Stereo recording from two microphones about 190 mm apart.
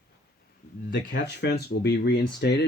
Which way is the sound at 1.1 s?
60° left (ahead or behind).